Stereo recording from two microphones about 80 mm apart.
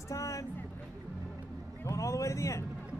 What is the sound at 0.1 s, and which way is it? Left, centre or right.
Vehicle, left.